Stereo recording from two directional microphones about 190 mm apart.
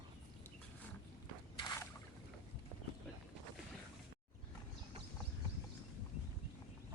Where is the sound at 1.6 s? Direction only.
20° left (ahead or behind).